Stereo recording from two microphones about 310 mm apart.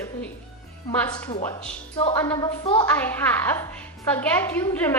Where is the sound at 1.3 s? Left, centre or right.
Centre.